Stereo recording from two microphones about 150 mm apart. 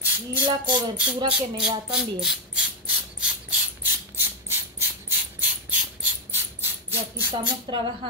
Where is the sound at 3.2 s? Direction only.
10° right (ahead or behind).